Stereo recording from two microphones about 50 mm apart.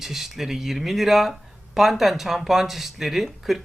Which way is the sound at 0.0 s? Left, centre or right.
Centre.